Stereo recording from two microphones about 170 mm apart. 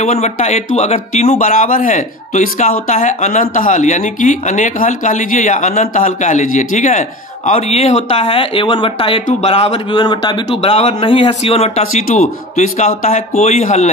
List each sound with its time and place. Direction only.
0.0 s speech: 40° left (ahead or behind)